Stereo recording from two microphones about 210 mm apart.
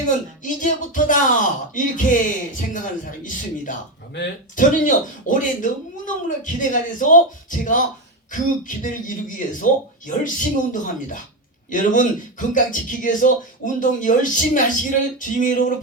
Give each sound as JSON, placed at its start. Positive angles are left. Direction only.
{"t": 0.4, "sound": "speech", "side_deg": 40}